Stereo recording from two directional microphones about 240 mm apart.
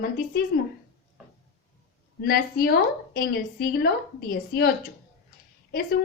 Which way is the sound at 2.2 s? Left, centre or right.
Left.